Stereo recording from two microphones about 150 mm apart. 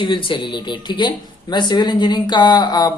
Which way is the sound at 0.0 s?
35° left (ahead or behind).